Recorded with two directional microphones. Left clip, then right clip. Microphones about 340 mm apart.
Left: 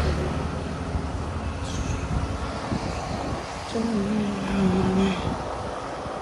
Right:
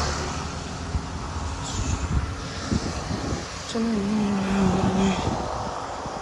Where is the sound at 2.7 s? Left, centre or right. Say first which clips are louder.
Even; left.